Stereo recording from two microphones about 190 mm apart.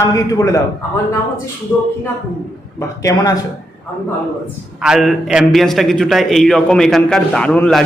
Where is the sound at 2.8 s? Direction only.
15° left (ahead or behind).